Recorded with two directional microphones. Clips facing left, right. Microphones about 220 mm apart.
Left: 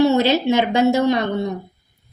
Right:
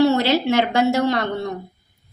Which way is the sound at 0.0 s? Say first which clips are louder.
Left 1 dB; 20° left (ahead or behind).